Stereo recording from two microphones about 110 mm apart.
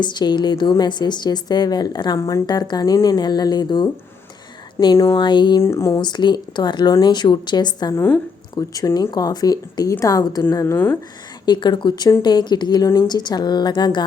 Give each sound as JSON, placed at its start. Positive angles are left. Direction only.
{"t": 0.0, "sound": "a woman's voice", "side_deg": 45}
{"t": 4.8, "sound": "speech", "side_deg": 20}
{"t": 5.1, "sound": "speech", "side_deg": 45}
{"t": 5.6, "sound": "speech", "side_deg": 25}
{"t": 6.0, "sound": "a woman's voice", "side_deg": 40}
{"t": 7.9, "sound": "a woman's voice", "side_deg": 20}
{"t": 8.5, "sound": "a woman's voice", "side_deg": 35}
{"t": 11.4, "sound": "a woman's voice", "side_deg": 45}